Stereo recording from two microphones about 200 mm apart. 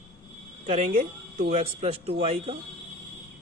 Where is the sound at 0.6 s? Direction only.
35° right (ahead or behind).